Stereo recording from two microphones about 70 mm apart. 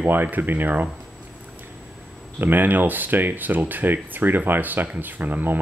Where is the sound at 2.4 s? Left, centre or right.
Right.